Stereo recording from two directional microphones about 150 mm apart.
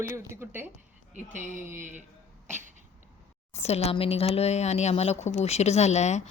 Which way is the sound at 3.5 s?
45° left (ahead or behind).